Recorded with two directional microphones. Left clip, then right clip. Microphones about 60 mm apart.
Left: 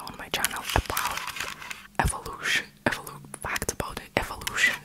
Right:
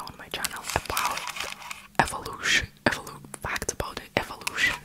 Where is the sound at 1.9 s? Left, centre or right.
Centre.